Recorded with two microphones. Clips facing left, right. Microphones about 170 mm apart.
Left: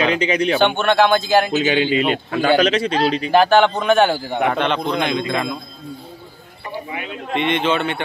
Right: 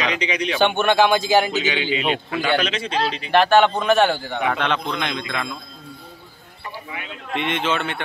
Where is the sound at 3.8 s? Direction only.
Centre (ahead or behind).